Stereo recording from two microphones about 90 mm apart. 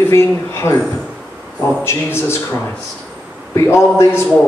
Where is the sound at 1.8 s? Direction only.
30° left (ahead or behind).